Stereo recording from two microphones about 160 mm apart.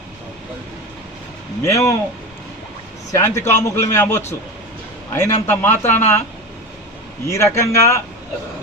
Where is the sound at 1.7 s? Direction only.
20° left (ahead or behind).